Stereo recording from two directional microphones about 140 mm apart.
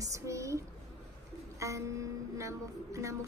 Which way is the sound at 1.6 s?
20° right (ahead or behind).